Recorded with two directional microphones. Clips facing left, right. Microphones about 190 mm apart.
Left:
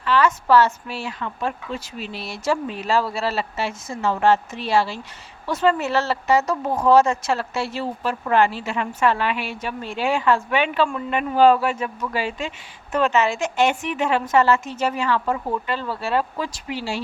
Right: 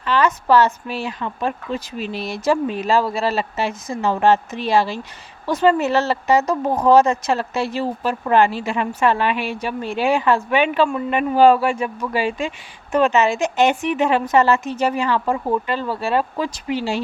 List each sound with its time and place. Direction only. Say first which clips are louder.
0.0 s a woman's voice: right 1 dB; 20° right (ahead or behind)